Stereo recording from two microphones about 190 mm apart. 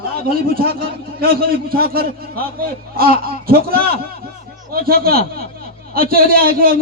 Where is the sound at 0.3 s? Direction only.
50° right (ahead or behind).